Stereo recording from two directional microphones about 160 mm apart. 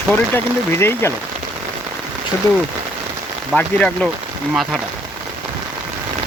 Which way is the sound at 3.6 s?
10° left (ahead or behind).